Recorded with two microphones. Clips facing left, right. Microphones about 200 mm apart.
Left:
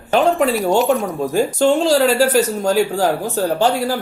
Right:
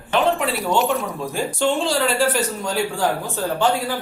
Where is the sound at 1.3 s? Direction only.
40° left (ahead or behind).